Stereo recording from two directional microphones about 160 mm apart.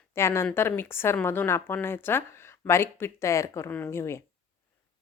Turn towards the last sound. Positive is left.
turn(degrees=15)  # may be behind; listen again after turning